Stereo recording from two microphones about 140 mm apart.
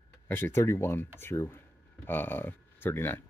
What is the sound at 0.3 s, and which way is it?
Speech, 15° left (ahead or behind).